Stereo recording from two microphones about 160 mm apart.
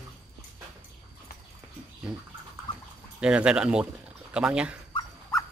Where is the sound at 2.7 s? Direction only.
35° left (ahead or behind).